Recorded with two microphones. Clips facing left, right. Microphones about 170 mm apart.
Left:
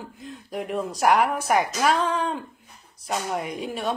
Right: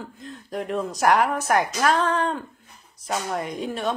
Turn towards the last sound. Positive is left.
turn(degrees=5)  # may be behind; listen again after turning